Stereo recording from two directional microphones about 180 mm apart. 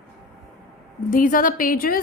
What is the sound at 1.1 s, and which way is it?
Speech, 50° left (ahead or behind).